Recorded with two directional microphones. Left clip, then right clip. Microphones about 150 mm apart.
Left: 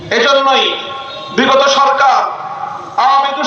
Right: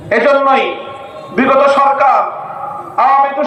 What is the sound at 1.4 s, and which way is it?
A man's voice, 25° right (ahead or behind).